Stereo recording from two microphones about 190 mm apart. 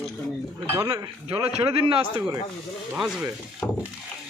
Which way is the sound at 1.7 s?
30° right (ahead or behind).